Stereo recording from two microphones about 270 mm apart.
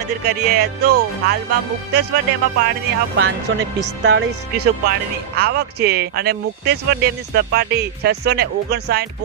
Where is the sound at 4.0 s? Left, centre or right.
Right.